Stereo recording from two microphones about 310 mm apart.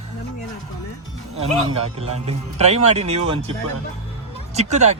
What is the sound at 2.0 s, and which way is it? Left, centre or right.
Speech, centre.